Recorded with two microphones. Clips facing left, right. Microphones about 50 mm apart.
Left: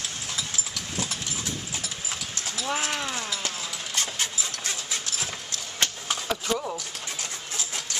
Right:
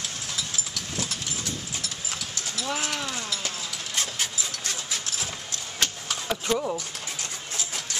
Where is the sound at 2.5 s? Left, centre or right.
Centre.